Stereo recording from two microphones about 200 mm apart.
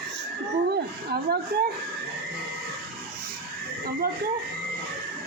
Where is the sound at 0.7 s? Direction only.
50° right (ahead or behind).